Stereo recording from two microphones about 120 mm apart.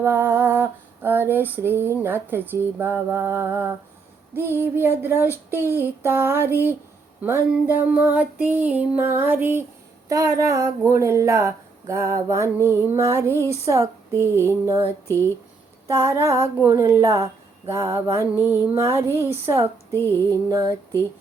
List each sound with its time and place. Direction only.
0.0 s female singing: 20° right (ahead or behind)
2.0 s speech: 15° right (ahead or behind)
4.5 s music: 20° right (ahead or behind)
5.5 s speech: 15° right (ahead or behind)
7.2 s music: 20° right (ahead or behind)
10.1 s speech: 30° right (ahead or behind)
15.9 s speech: 25° right (ahead or behind)
20.0 s music: 20° left (ahead or behind)
20.5 s speech: 30° right (ahead or behind)